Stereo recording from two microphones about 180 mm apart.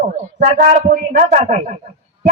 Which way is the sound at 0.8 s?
45° right (ahead or behind).